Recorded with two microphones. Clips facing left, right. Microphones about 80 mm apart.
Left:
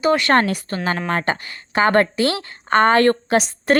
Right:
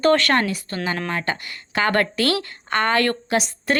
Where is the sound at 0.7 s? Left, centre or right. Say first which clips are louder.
Left 4 dB; left.